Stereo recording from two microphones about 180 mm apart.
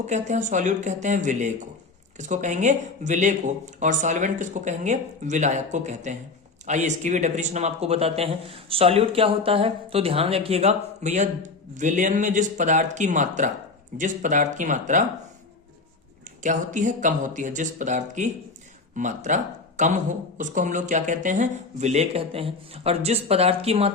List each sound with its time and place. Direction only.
0.0 s speech: 40° right (ahead or behind)
16.4 s speech: 45° right (ahead or behind)